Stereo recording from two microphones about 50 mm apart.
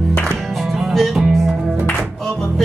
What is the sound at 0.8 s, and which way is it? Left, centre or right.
Music, centre.